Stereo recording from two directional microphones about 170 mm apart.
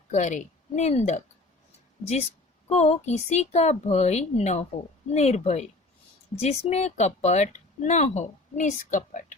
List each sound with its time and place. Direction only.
0.1 s speech: 45° left (ahead or behind)
2.6 s speech: 40° left (ahead or behind)